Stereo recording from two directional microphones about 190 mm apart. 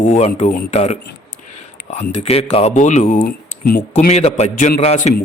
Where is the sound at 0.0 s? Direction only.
40° left (ahead or behind).